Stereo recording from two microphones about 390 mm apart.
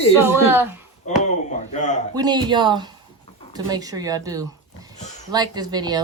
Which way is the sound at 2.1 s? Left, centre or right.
Centre.